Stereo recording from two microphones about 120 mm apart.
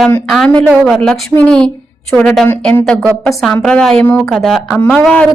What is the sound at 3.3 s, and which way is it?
A woman's voice, centre (ahead or behind).